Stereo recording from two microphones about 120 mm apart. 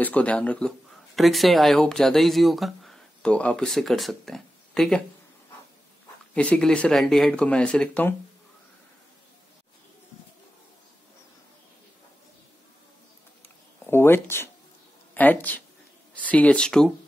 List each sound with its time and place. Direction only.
0.0 s speech: 10° left (ahead or behind)
6.3 s speech: 5° left (ahead or behind)
13.8 s speech: 20° left (ahead or behind)